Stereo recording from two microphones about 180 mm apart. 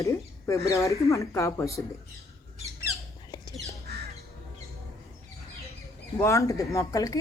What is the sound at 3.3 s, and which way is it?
Squawk, 20° left (ahead or behind).